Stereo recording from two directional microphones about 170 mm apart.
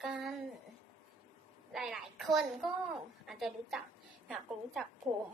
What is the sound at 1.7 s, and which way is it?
Child singing, centre (ahead or behind).